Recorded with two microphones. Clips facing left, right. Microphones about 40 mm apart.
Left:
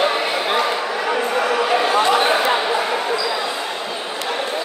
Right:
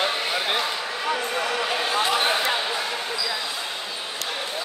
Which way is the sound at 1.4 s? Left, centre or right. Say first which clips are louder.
Left 7 dB; left.